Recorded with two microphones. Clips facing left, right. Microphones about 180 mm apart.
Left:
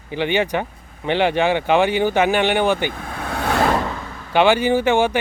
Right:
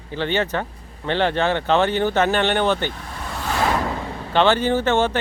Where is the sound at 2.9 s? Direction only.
55° left (ahead or behind).